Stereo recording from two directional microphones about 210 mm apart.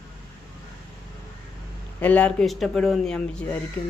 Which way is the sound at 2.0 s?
5° left (ahead or behind).